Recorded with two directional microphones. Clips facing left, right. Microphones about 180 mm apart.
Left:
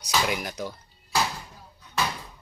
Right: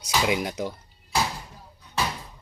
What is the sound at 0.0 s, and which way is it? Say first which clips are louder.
Speech: right 3 dB; 20° right (ahead or behind).